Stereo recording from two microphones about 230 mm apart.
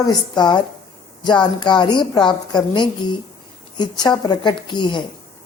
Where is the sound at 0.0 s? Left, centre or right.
Centre.